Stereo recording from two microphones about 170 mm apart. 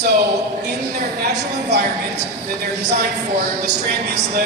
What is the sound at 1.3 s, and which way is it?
Speech, 80° right.